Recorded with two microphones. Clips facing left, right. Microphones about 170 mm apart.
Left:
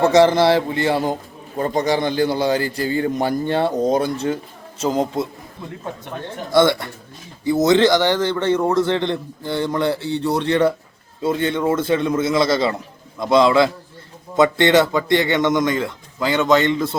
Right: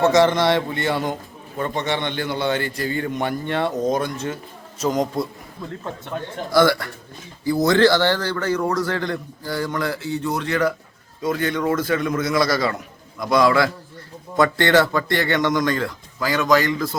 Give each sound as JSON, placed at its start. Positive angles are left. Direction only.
{"t": 0.0, "sound": "a man's voice", "side_deg": 30}
{"t": 6.5, "sound": "a man's voice", "side_deg": 25}